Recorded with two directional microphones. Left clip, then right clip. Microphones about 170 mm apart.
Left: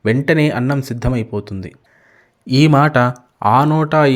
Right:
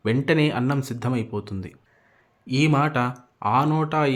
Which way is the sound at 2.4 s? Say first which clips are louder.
Left 9 dB; 35° left (ahead or behind).